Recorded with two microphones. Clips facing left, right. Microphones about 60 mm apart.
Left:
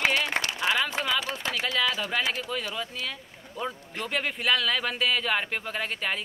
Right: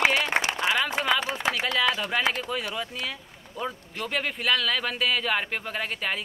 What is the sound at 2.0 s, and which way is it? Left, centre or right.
Speech, centre.